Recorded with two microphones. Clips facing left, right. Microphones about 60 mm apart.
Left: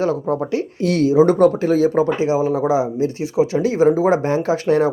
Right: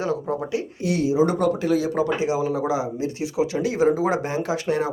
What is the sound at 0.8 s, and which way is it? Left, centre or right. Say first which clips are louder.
Speech: left 6 dB; left.